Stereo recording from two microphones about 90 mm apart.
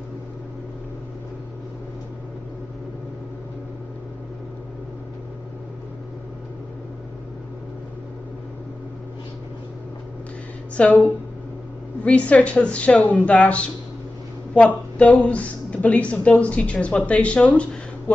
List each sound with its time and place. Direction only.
10.8 s a woman's voice: 15° left (ahead or behind)
12.0 s a woman's voice: 15° left (ahead or behind)